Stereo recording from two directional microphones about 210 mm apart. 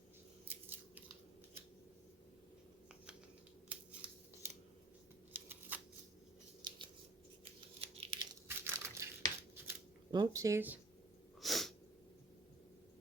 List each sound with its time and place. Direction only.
0.4 s biting: 10° right (ahead or behind)
3.7 s scissors: 5° right (ahead or behind)
5.3 s a sound: 10° right (ahead or behind)
6.6 s scissors: 20° right (ahead or behind)
7.8 s a sound: 25° right (ahead or behind)
8.4 s crushing: 10° right (ahead or behind)
9.6 s scissors: 15° right (ahead or behind)
11.3 s sneeze: centre (ahead or behind)